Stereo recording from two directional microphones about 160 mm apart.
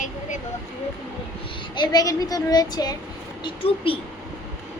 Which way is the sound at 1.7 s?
25° left (ahead or behind).